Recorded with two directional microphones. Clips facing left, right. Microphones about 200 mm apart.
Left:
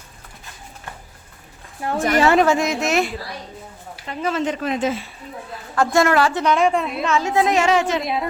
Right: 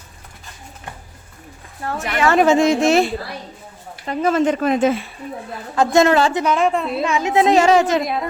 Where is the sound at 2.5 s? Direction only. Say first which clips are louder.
Right 5 dB; 30° right (ahead or behind).